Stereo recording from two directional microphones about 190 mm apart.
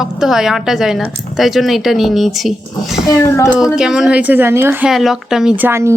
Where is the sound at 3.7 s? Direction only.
5° right (ahead or behind).